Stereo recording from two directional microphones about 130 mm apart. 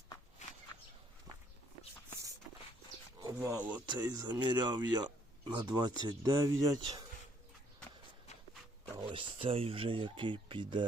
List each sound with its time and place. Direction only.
3.3 s speech: 20° right (ahead or behind)
3.6 s speech: 10° right (ahead or behind)
3.8 s speech: 30° right (ahead or behind)
9.0 s speech: 40° right (ahead or behind)